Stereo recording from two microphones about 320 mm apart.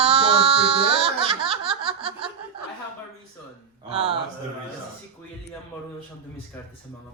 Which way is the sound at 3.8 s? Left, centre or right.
Centre.